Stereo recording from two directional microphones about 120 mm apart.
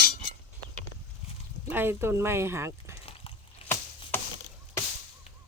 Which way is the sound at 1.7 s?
20° right (ahead or behind).